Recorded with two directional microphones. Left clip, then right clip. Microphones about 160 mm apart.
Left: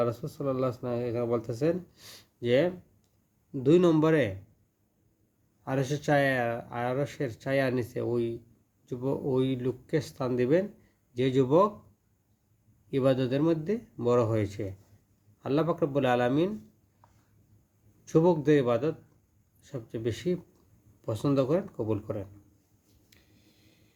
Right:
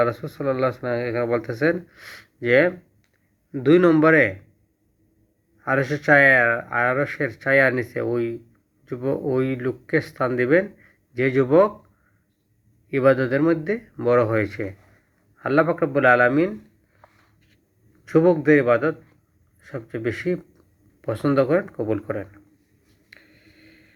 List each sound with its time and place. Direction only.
0.0 s speech: 25° left (ahead or behind)
5.6 s speech: 35° left (ahead or behind)
9.0 s speech: 35° left (ahead or behind)
12.9 s speech: 35° left (ahead or behind)
18.0 s speech: 35° left (ahead or behind)